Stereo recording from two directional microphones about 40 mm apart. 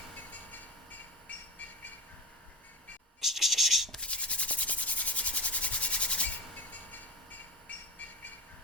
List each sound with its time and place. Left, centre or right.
0.3 s train: left
3.2 s scratch: centre
4.0 s rub: left